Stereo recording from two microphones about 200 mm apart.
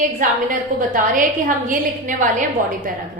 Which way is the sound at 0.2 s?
40° right (ahead or behind).